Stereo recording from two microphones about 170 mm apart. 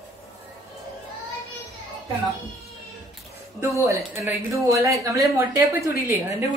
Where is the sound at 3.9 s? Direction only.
15° right (ahead or behind).